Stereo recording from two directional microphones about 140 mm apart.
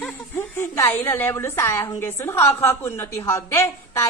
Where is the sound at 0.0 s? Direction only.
15° left (ahead or behind).